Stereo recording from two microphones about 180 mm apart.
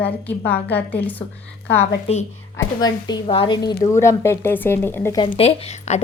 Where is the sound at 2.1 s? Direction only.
35° left (ahead or behind).